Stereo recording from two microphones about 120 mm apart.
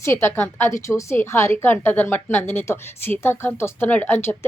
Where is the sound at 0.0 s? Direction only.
20° left (ahead or behind).